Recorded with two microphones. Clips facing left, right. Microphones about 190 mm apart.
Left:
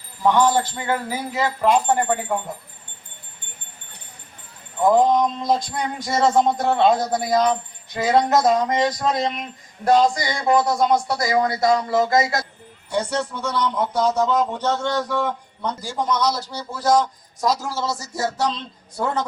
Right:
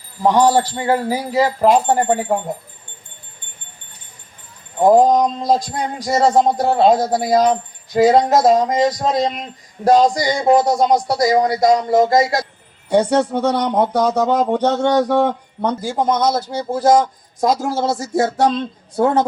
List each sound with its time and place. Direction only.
0.2 s speech: 40° right (ahead or behind)
4.8 s speech: 40° right (ahead or behind); by 7.5 s 25° right (ahead or behind)
7.5 s speech: 35° right (ahead or behind)
8.2 s speech: 25° right (ahead or behind)
10.4 s speech: 30° right (ahead or behind)
11.9 s music: 45° right (ahead or behind)
12.9 s speech: 60° right (ahead or behind)